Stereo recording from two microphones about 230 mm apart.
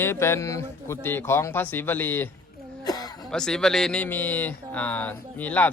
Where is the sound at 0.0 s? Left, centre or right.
Centre.